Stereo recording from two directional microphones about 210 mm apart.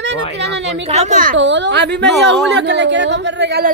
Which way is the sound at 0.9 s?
35° right (ahead or behind).